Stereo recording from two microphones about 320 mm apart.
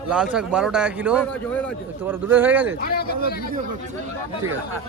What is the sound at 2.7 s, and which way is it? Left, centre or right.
Speech, left.